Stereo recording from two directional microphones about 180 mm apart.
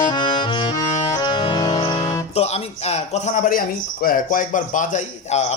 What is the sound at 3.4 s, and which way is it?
Speech, 50° left (ahead or behind).